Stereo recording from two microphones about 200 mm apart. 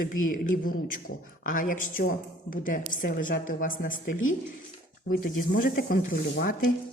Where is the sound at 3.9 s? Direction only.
80° left.